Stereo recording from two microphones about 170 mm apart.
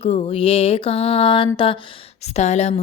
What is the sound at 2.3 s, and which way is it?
Music, 40° left (ahead or behind).